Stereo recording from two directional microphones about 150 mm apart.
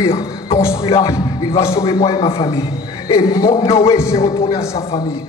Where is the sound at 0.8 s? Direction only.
40° left (ahead or behind).